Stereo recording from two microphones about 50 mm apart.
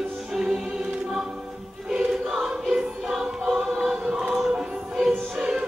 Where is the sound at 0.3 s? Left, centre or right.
Centre.